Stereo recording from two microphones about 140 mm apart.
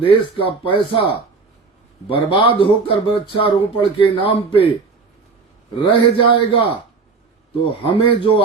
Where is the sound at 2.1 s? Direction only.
40° left (ahead or behind).